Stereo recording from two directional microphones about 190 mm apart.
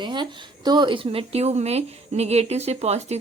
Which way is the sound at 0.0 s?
25° right (ahead or behind).